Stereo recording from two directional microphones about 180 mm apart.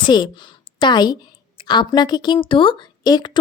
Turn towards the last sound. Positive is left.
turn(degrees=25)  # may be behind; listen again after turning